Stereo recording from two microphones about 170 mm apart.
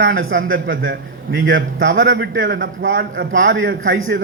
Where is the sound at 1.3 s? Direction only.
90° right.